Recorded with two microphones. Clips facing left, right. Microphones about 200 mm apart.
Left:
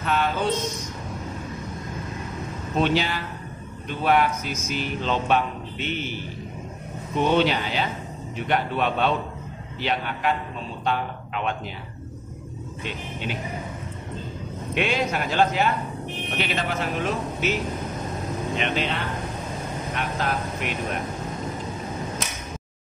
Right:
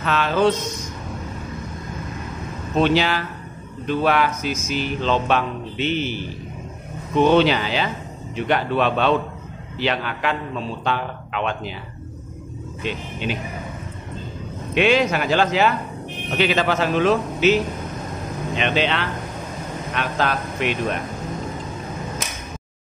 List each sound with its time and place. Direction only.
0.0 s speech: 90° right
2.8 s speech: 90° right
7.2 s speech: 90° right
12.8 s speech: 90° right
14.7 s speech: 90° right
18.6 s speech: 90° right